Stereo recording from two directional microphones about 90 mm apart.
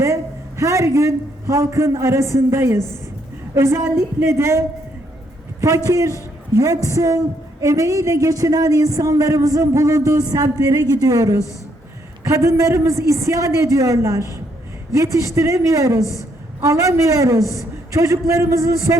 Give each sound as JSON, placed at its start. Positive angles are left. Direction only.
{"t": 0.0, "sound": "a woman's voice", "side_deg": -35}